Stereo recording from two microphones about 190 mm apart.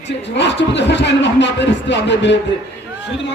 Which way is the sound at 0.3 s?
65° left (ahead or behind).